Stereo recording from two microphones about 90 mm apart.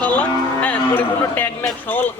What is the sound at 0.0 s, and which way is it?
Music, 15° left (ahead or behind).